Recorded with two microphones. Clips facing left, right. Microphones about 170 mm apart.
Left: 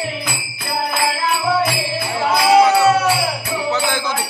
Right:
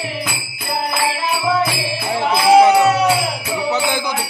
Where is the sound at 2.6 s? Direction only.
20° right (ahead or behind).